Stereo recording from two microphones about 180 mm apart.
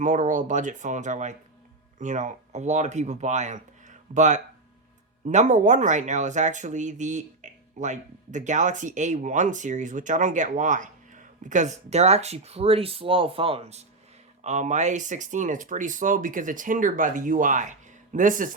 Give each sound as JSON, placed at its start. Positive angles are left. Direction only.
{"t": 0.0, "sound": "speech", "side_deg": -45}